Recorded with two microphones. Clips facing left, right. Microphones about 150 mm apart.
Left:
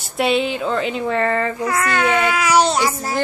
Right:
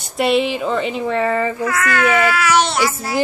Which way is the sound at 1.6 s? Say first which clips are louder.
Even; 30° left (ahead or behind).